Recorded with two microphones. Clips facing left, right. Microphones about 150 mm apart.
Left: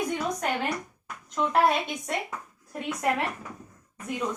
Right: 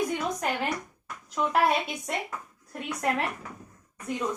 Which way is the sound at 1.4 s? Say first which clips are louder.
Left 1 dB; 5° right (ahead or behind).